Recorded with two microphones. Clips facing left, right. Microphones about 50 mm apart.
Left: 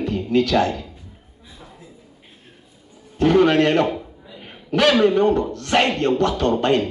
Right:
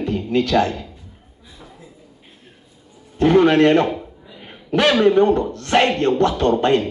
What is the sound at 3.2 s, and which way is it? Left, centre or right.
A man's voice, right.